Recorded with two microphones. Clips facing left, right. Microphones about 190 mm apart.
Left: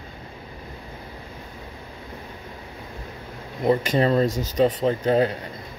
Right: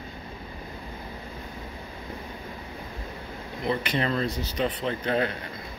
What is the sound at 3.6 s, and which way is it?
Speech, 45° left (ahead or behind).